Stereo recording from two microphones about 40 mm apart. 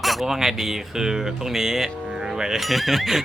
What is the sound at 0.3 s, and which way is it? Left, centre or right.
Speech, centre.